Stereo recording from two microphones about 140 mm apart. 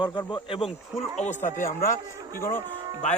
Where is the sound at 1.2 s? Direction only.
55° left (ahead or behind); by 1.8 s 80° left.